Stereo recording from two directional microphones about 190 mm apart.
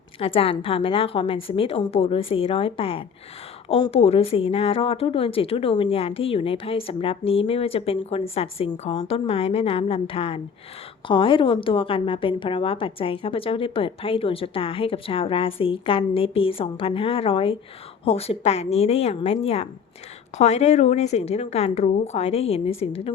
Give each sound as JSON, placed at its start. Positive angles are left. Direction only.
{"t": 0.2, "sound": "a woman's voice", "side_deg": 30}